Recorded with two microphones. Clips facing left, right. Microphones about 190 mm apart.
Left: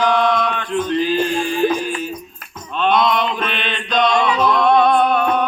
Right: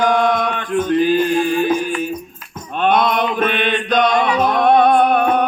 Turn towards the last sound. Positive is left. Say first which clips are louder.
# right 2 dB
turn(degrees=-50)  # may be behind; listen again after turning